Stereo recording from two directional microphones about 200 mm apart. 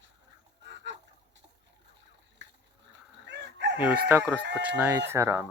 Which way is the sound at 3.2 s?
60° right (ahead or behind).